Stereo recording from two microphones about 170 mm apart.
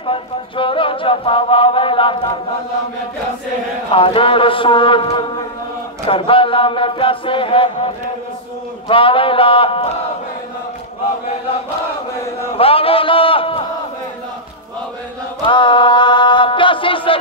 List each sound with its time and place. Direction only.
0.0 s chant: 30° left (ahead or behind)
3.9 s chant: 30° left (ahead or behind)
12.5 s a man's voice: 35° left (ahead or behind)
15.4 s chant: 30° left (ahead or behind)